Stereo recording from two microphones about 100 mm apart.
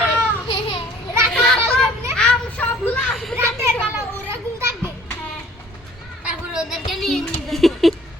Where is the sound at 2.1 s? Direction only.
15° left (ahead or behind).